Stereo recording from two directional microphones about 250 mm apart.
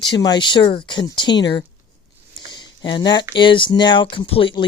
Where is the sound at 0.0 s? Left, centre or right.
Centre.